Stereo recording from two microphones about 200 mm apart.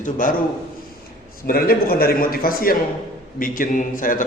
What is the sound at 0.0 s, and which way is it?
Speech, 40° left (ahead or behind).